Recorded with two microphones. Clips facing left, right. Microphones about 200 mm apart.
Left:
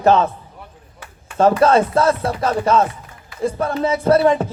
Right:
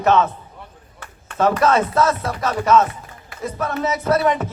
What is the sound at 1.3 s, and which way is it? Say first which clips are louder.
A man's voice: left 3 dB; 30° left (ahead or behind).